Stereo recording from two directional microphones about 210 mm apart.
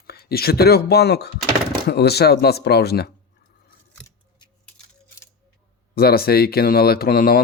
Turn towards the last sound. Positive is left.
turn(degrees=45)  # may be behind; listen again after turning